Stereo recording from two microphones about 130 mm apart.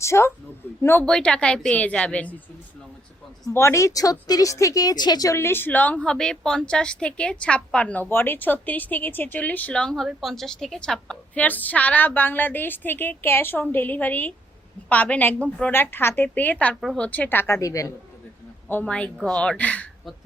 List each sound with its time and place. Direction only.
0.0 s a woman's voice: 20° left (ahead or behind)
1.0 s speech: 5° left (ahead or behind)
3.5 s speech: 20° left (ahead or behind)
16.8 s a woman's voice: centre (ahead or behind)
17.1 s a woman's voice: 15° left (ahead or behind)
18.7 s speech: 10° left (ahead or behind)